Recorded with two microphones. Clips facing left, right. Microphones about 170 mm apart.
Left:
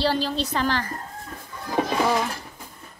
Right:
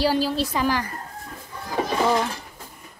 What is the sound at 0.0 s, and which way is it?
Speech, 10° right (ahead or behind).